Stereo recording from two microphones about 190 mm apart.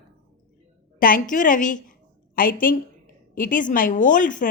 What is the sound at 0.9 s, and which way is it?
A woman's voice, 50° left (ahead or behind).